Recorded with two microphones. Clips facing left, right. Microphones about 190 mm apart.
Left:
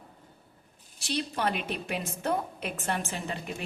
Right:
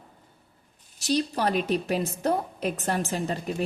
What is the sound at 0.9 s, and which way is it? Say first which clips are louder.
A woman's voice: right 6 dB; 40° right (ahead or behind).